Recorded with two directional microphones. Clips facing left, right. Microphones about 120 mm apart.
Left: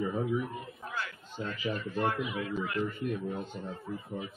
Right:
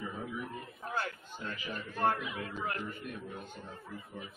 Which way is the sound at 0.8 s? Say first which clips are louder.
Right 3 dB; 35° right (ahead or behind).